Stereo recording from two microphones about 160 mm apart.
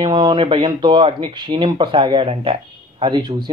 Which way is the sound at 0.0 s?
30° right (ahead or behind).